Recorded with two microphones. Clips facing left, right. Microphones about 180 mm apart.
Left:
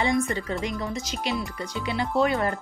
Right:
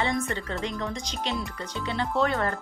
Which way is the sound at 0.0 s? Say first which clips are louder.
Left 3 dB; 15° left (ahead or behind).